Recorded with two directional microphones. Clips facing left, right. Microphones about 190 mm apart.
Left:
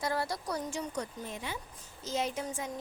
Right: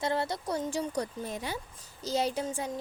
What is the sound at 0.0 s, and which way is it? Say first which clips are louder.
A woman's voice: right 3 dB; 25° right (ahead or behind).